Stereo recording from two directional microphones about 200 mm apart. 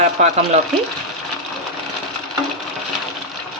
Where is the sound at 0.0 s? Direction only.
35° right (ahead or behind).